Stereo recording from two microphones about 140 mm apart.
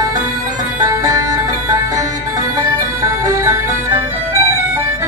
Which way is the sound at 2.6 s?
20° right (ahead or behind).